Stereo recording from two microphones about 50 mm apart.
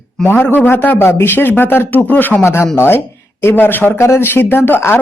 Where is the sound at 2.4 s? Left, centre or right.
Left.